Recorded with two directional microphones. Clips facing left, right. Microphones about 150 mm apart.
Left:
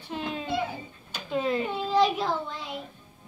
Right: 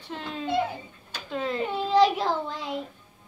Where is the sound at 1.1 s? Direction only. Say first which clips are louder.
Left 3 dB; 15° left (ahead or behind).